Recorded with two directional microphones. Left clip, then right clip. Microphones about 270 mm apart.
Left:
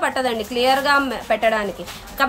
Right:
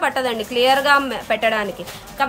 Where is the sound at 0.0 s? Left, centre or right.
Centre.